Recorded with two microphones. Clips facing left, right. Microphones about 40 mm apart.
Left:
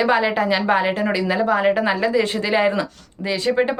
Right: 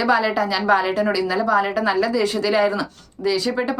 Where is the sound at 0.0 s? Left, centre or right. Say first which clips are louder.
Left 1 dB; left.